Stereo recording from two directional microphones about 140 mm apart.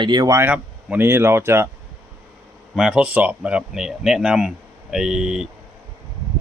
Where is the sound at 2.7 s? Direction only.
5° right (ahead or behind).